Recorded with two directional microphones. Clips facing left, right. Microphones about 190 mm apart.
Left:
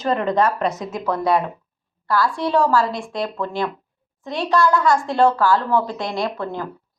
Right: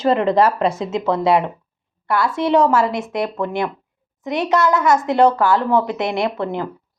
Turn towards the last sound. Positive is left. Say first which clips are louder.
# right 3 dB
turn(degrees=-20)  # may be behind; listen again after turning